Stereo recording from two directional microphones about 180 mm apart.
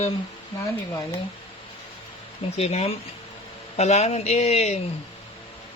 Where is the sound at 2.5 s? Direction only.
35° left (ahead or behind).